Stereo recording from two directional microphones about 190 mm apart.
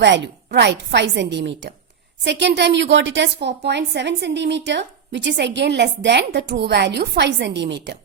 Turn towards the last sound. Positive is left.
turn(degrees=-65)  # may be behind; listen again after turning